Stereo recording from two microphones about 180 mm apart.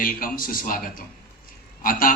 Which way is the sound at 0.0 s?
50° left (ahead or behind).